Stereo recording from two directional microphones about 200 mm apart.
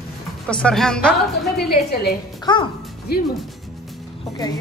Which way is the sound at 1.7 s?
50° left (ahead or behind).